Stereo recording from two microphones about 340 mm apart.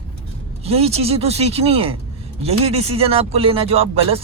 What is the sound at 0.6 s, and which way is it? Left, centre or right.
Speech, centre.